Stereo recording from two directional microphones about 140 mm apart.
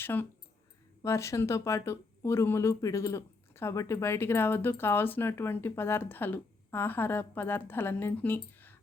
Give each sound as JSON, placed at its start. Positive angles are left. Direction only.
{"t": 0.0, "sound": "speech", "side_deg": 15}